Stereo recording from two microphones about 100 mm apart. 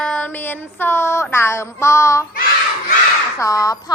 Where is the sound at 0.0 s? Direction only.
10° left (ahead or behind).